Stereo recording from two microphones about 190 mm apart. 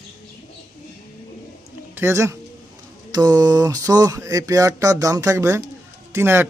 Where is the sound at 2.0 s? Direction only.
15° right (ahead or behind).